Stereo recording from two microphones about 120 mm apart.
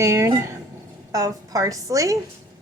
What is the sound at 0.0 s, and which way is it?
A woman's voice, 25° right (ahead or behind).